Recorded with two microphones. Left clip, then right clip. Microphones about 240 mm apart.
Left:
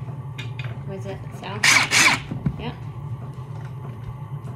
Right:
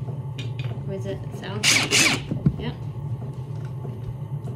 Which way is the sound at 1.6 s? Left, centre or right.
Centre.